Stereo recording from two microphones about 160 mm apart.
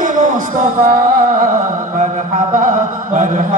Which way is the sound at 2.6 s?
55° right (ahead or behind).